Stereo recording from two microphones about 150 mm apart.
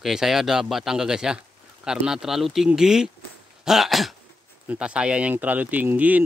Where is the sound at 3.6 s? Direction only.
Centre (ahead or behind).